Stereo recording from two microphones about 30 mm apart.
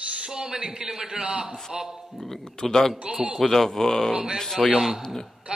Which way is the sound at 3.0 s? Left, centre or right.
Right.